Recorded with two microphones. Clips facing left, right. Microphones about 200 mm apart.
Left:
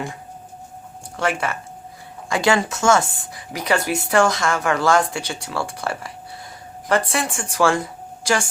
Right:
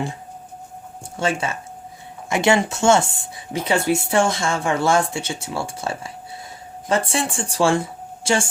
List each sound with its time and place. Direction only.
1.1 s a woman's voice: 25° right (ahead or behind)